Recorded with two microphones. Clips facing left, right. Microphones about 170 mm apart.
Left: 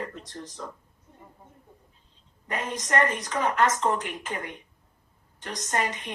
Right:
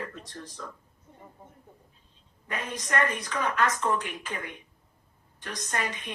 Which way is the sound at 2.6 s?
45° left (ahead or behind).